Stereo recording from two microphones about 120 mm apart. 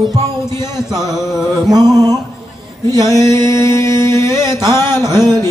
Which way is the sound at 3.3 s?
25° left (ahead or behind).